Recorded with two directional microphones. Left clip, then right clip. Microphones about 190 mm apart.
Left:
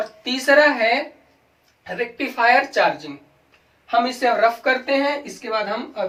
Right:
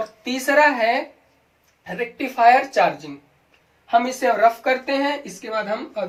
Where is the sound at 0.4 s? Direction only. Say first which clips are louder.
Left 1 dB; 20° left (ahead or behind).